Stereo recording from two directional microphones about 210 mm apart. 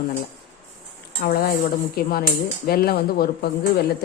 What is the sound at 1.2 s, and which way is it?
A woman's voice, 50° left (ahead or behind).